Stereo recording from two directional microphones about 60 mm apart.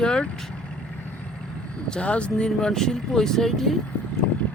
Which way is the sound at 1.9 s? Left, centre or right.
Centre.